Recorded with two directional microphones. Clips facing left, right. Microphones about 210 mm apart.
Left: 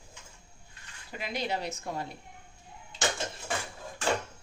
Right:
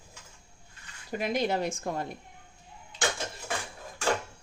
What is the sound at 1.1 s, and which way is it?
Speech, 45° right (ahead or behind).